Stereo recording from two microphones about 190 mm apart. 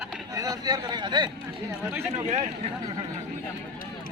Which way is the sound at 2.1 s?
35° right (ahead or behind).